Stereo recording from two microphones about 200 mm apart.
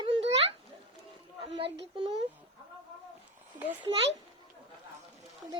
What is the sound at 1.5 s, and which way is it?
Child singing, 25° right (ahead or behind).